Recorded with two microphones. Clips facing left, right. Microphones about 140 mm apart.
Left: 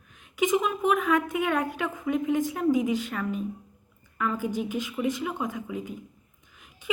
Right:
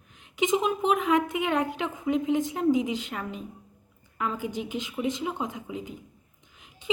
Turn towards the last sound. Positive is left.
turn(degrees=-20)  # may be behind; listen again after turning